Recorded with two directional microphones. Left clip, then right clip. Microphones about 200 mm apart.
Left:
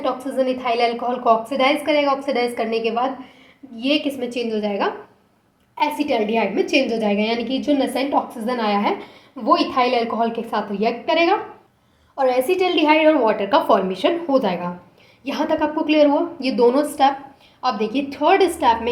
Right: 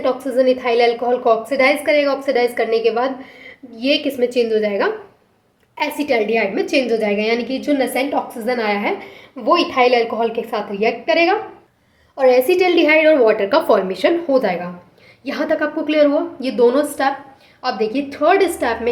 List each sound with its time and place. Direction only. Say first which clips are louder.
0.0 s a woman's voice: right 5 dB; 30° right (ahead or behind); by 11.3 s 15° right (ahead or behind)
12.1 s a woman's voice: right 5 dB; 30° right (ahead or behind)